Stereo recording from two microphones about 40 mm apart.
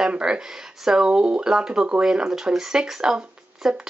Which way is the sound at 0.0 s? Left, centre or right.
Centre.